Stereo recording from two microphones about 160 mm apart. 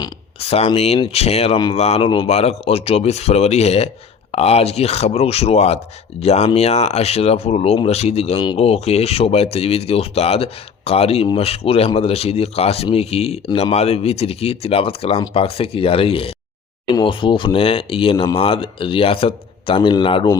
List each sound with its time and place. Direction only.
0.3 s speech: 40° left (ahead or behind)